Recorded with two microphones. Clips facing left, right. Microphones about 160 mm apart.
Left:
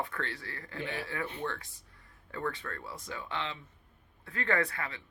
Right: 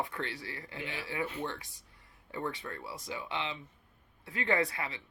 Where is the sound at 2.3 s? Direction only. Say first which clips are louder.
Left 1 dB; 20° right (ahead or behind).